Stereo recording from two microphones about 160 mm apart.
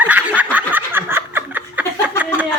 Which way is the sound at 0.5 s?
10° right (ahead or behind).